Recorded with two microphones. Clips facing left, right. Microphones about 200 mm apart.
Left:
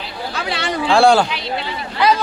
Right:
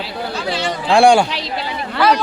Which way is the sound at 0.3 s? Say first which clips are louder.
Right 2 dB; 65° left (ahead or behind).